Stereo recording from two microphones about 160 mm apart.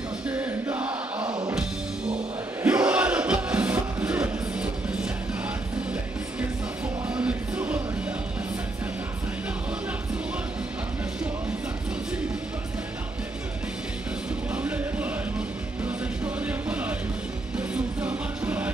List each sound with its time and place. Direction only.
0.3 s music: 10° right (ahead or behind)
1.2 s music: 25° right (ahead or behind)
1.5 s music: 5° right (ahead or behind)
7.2 s music: 10° right (ahead or behind)
14.5 s music: 10° right (ahead or behind)
16.4 s music: 10° right (ahead or behind)